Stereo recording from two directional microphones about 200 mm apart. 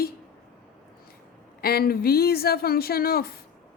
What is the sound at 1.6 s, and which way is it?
Speech, 50° left (ahead or behind).